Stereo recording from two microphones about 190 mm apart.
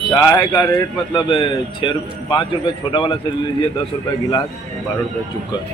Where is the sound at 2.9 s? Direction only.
25° left (ahead or behind).